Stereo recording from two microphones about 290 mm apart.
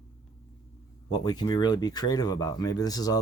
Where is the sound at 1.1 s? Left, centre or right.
Centre.